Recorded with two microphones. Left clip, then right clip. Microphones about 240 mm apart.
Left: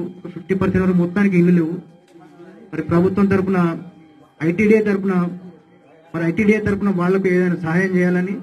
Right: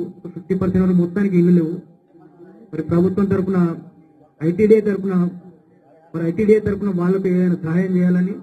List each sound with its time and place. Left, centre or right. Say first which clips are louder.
0.5 s a man's voice: left 1 dB; left